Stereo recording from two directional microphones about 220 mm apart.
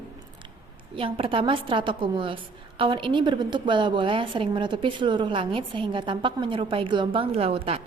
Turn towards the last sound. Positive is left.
turn(degrees=-25)  # may be behind; listen again after turning